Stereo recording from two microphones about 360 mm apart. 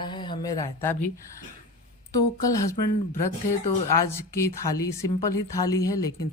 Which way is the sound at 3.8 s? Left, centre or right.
Left.